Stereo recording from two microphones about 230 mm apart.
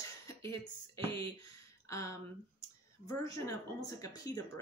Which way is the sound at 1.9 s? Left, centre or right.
Centre.